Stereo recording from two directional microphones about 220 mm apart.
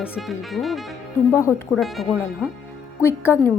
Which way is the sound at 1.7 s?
Centre (ahead or behind).